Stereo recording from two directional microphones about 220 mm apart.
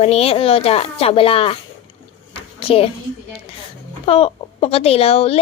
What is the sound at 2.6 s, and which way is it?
Speech, 25° left (ahead or behind).